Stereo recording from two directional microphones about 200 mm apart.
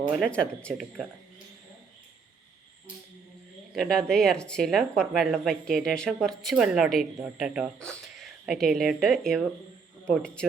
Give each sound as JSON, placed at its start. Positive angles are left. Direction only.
{"t": 0.2, "sound": "speech", "side_deg": 5}
{"t": 3.8, "sound": "speech", "side_deg": 5}